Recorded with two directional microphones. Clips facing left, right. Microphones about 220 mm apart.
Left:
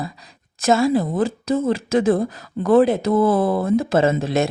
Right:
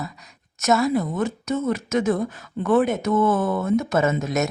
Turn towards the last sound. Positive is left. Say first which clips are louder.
# left 3 dB
turn(degrees=30)  # may be behind; listen again after turning